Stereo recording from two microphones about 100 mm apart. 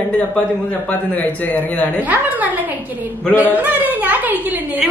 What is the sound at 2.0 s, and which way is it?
A woman's voice, 15° right (ahead or behind).